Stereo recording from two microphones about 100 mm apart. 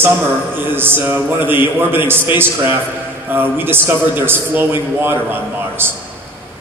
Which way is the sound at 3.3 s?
20° right (ahead or behind).